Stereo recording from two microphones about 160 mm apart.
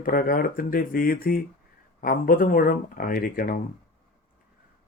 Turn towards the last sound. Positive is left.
turn(degrees=65)  # may be behind; listen again after turning